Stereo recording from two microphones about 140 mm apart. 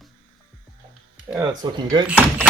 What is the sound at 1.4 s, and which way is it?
Speech, 30° right (ahead or behind).